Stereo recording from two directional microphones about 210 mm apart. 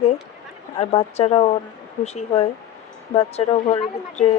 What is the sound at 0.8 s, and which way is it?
A woman's voice, 30° left (ahead or behind).